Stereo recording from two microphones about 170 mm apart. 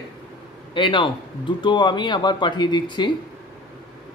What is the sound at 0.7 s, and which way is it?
Speech, 30° left (ahead or behind).